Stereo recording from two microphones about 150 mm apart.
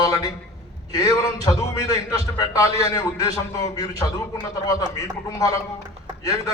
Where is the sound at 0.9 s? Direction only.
25° left (ahead or behind).